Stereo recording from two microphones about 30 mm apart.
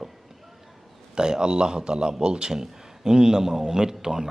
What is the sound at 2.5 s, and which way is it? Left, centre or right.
Speech, centre.